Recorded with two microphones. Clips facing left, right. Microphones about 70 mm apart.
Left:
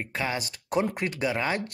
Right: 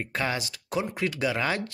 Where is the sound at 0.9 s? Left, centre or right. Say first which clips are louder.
Right 1 dB; left.